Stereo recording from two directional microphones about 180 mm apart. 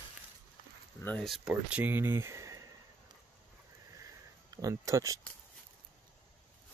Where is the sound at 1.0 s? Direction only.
5° left (ahead or behind); by 2.6 s 15° right (ahead or behind).